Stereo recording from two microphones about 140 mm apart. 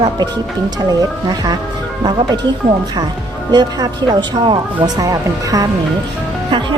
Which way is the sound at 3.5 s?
30° right (ahead or behind).